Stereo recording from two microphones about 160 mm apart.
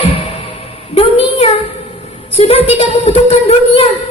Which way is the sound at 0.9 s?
35° left (ahead or behind).